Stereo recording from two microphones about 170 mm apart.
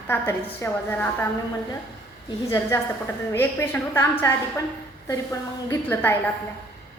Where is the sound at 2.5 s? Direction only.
15° left (ahead or behind).